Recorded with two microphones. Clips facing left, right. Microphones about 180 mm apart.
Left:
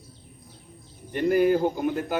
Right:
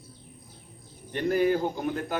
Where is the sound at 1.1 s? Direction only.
10° left (ahead or behind).